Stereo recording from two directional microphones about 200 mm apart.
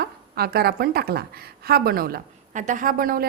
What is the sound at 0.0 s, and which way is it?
A woman's voice, 50° right (ahead or behind).